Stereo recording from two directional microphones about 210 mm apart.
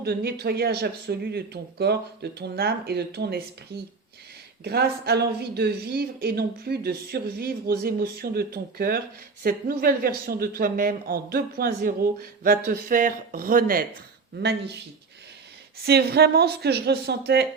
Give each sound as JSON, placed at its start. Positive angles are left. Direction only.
{"t": 0.0, "sound": "speech", "side_deg": -50}
{"t": 4.6, "sound": "speech", "side_deg": -50}
{"t": 15.8, "sound": "speech", "side_deg": -50}